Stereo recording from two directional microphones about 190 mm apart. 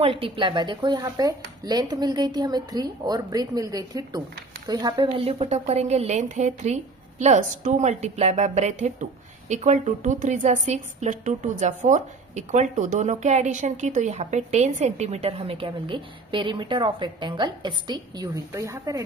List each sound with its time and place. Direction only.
0.0 s a woman's voice: 30° right (ahead or behind)